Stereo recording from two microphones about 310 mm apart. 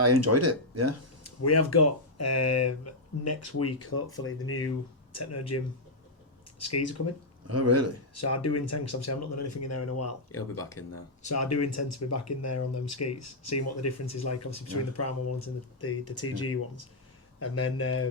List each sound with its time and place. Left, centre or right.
0.0 s speech: right
1.2 s speech: left
7.4 s speech: right
8.2 s speech: left